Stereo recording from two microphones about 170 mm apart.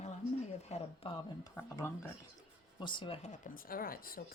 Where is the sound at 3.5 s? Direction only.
60° left (ahead or behind).